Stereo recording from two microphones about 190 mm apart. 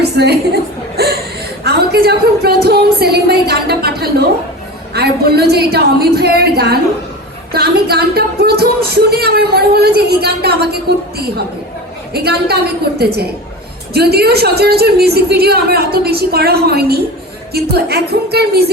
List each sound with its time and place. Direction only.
0.0 s chuckle: 60° right (ahead or behind)
1.6 s speech: 60° right (ahead or behind)
12.1 s speech: 55° right (ahead or behind)